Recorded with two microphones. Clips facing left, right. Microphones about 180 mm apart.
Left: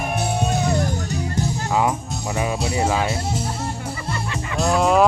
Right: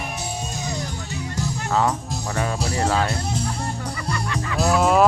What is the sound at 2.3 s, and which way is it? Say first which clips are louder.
Speech: left 2 dB; 5° left (ahead or behind).